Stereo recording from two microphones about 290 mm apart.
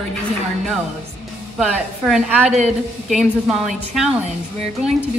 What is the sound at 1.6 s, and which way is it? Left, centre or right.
Speech, centre.